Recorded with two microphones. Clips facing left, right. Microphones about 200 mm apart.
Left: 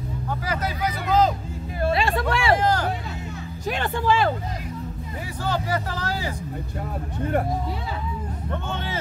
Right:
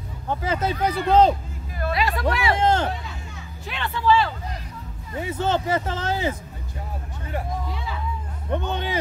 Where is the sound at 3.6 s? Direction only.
45° left (ahead or behind).